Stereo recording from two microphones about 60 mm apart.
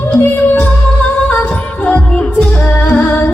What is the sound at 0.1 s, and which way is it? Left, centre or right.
Music, left.